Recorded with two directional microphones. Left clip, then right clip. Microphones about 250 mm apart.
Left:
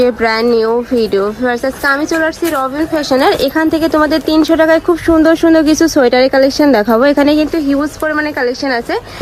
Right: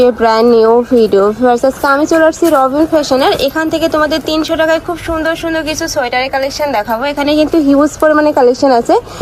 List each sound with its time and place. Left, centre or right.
0.0 s speech: centre
7.2 s speech: centre